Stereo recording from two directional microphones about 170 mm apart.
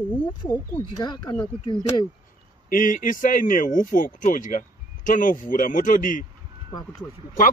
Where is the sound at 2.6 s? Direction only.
55° left (ahead or behind).